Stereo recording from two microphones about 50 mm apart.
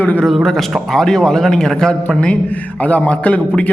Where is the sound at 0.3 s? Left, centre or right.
Centre.